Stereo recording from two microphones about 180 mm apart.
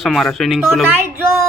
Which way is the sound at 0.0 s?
Centre (ahead or behind).